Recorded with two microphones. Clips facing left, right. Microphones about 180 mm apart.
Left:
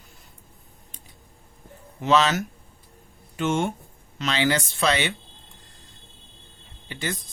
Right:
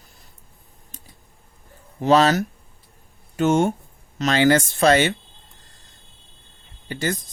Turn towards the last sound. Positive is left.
turn(degrees=-45)  # may be behind; listen again after turning